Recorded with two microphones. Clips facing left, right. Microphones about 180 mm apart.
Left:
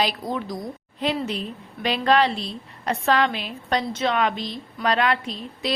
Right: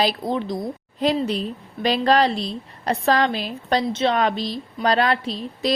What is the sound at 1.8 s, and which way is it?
A woman's voice, 35° right (ahead or behind).